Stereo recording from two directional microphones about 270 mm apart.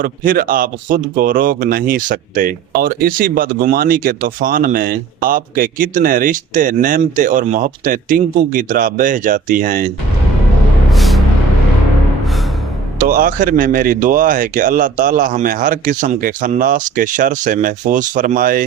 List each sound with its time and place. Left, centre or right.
0.0 s speech: right
10.9 s vehicle: centre
13.1 s speech: right